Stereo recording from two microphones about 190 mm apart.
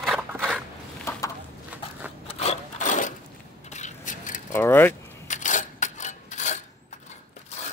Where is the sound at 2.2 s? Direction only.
35° left (ahead or behind).